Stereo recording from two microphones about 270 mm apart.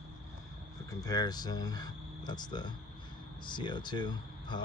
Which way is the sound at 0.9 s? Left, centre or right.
Centre.